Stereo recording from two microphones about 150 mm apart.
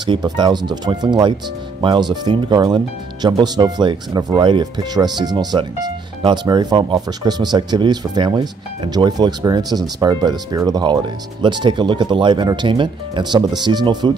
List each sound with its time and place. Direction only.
0.0 s speech: 30° right (ahead or behind)